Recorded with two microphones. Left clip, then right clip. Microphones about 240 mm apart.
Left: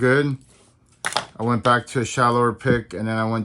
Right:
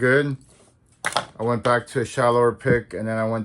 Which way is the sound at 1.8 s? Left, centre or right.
Left.